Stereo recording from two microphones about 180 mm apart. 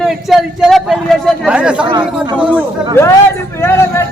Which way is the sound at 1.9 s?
25° right (ahead or behind).